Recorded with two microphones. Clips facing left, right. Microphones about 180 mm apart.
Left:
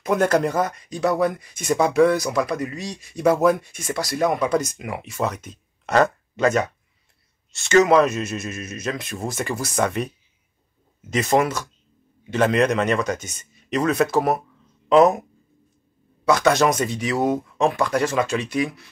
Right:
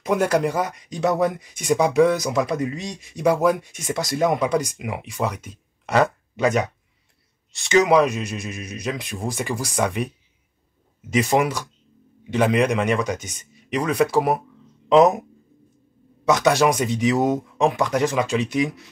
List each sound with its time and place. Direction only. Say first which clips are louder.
0.0 s speech: left 1 dB; 10° right (ahead or behind)
11.1 s speech: even; 10° right (ahead or behind)
16.3 s speech: even; 15° right (ahead or behind)